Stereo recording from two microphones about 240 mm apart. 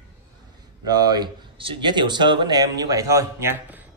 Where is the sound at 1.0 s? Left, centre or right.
Centre.